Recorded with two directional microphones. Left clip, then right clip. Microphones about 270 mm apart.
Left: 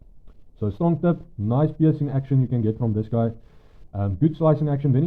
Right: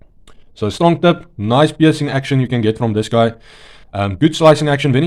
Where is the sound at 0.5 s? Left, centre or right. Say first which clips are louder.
Right 11 dB; centre.